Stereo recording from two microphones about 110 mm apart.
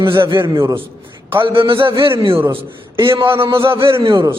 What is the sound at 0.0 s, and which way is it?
Speech, 50° right (ahead or behind).